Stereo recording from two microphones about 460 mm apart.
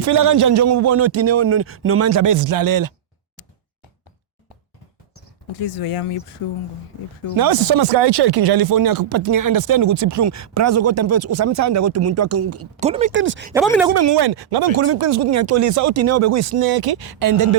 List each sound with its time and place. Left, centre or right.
0.0 s speech: right
5.8 s speech: left
7.3 s speech: right
12.8 s speech: centre
13.5 s speech: centre
13.9 s speech: right
14.2 s speech: right
14.8 s speech: right
16.6 s speech: right